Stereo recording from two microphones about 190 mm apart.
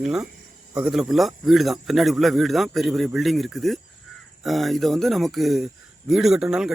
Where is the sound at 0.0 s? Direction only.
5° right (ahead or behind).